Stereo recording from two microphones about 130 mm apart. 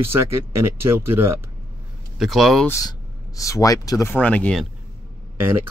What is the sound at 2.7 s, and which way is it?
Speech, 25° left (ahead or behind).